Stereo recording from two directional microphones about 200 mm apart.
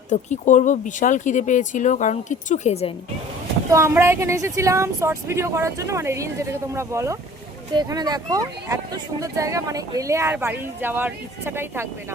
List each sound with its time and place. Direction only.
0.1 s speech: 35° left (ahead or behind)
3.7 s speech: 15° right (ahead or behind)